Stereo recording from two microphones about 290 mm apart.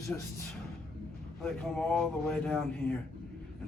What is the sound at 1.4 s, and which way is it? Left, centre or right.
Speech, centre.